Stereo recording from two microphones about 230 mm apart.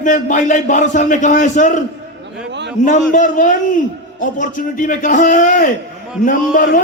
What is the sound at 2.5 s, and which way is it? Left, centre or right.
Speech, right.